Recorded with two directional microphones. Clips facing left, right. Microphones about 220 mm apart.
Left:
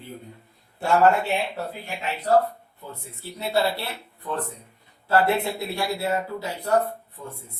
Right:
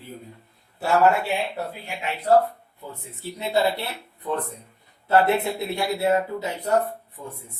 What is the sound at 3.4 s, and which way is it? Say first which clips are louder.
Speech: right 1 dB; 20° right (ahead or behind).